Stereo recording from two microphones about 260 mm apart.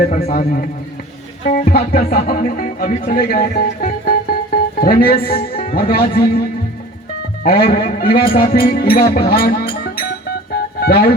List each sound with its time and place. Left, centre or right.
0.0 s a man's voice: left
1.5 s music: left
7.4 s speech: left